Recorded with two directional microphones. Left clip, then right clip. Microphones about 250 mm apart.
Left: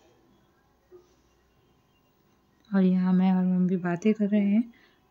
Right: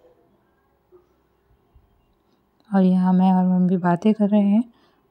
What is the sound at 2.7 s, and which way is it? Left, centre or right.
Speech, centre.